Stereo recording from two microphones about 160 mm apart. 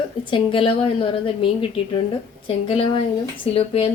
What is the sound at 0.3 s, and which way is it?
Speech, 35° left (ahead or behind).